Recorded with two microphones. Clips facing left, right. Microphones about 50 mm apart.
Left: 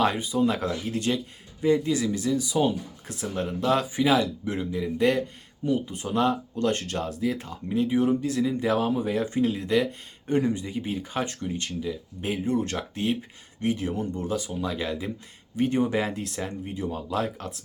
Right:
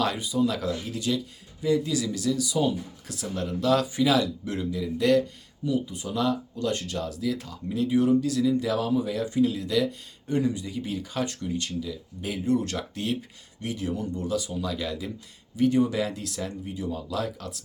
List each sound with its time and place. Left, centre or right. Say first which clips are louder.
0.0 s speech: left 2 dB; left
5.6 s speech: left 1 dB; left